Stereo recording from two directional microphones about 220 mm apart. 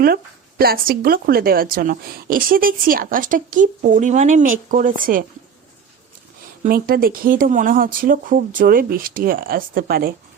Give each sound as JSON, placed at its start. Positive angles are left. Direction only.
{"t": 0.6, "sound": "speech", "side_deg": -45}
{"t": 6.6, "sound": "speech", "side_deg": -40}